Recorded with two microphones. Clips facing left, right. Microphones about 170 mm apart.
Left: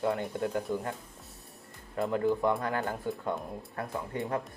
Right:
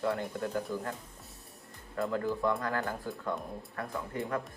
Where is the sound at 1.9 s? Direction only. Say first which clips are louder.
Left 4 dB; 20° left (ahead or behind).